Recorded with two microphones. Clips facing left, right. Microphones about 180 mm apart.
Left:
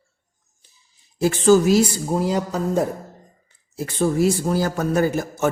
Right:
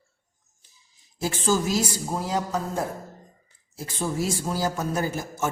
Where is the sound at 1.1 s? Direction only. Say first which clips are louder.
Left 9 dB; 65° left (ahead or behind).